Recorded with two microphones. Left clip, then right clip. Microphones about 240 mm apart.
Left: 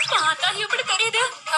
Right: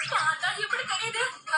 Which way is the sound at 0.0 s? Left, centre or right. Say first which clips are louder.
Left 6 dB; left.